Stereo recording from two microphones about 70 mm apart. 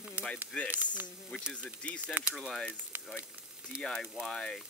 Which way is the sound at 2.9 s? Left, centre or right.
Right.